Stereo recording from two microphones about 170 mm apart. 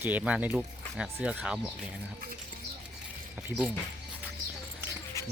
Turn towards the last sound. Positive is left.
turn(degrees=20)  # may be behind; listen again after turning